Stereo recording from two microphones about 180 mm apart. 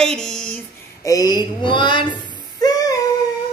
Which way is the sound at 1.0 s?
20° left (ahead or behind).